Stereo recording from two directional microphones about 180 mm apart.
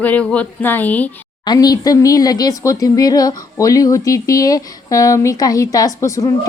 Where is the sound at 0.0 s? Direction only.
10° left (ahead or behind).